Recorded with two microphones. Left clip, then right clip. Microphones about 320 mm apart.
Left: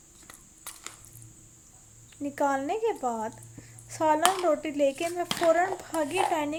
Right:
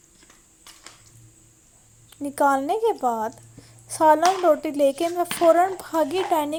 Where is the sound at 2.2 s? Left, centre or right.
Centre.